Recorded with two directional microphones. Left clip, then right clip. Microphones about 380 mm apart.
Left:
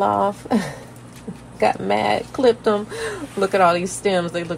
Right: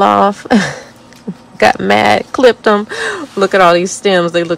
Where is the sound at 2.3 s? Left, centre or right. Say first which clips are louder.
Right 7 dB; right.